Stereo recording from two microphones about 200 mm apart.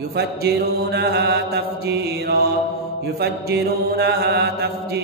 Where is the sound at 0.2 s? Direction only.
55° right (ahead or behind).